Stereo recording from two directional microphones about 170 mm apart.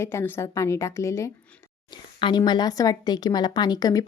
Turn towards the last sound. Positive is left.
turn(degrees=20)  # may be behind; listen again after turning